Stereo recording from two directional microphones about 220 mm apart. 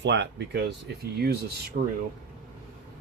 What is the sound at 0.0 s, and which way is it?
Speech, 55° right (ahead or behind).